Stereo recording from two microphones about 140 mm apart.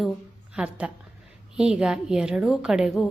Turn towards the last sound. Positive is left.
turn(degrees=0)  # may be behind; listen again after turning